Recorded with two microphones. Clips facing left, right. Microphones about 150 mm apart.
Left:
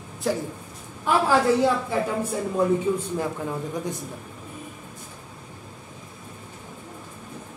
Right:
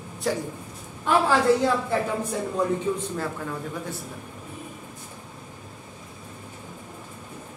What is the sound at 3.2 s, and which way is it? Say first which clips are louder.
Speech: left 3 dB; 15° left (ahead or behind).